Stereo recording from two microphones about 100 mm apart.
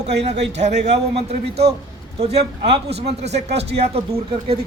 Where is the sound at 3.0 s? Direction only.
90° right.